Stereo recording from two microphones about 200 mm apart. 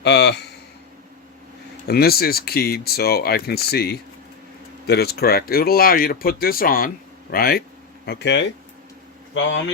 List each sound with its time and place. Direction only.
0.0 s speech: 55° left (ahead or behind)
1.9 s speech: 50° left (ahead or behind)
9.3 s speech: 70° left (ahead or behind)